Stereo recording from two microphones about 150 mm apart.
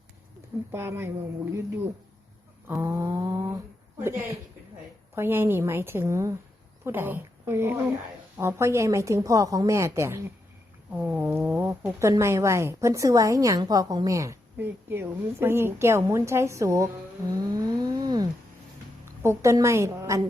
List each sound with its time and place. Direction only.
0.7 s a woman's voice: 15° right (ahead or behind)
2.6 s a woman's voice: 20° right (ahead or behind)
17.3 s a sound: 25° right (ahead or behind)
19.2 s speech: 20° right (ahead or behind)